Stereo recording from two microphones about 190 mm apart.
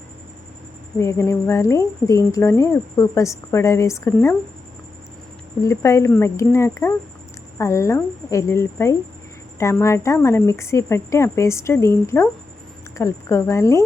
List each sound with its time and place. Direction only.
0.9 s speech: 15° left (ahead or behind)
5.6 s speech: 15° left (ahead or behind)